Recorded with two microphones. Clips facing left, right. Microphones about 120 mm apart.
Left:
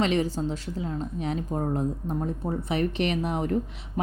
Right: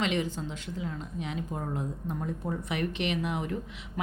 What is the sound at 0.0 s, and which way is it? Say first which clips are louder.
A woman's voice: left 5 dB; 35° left (ahead or behind).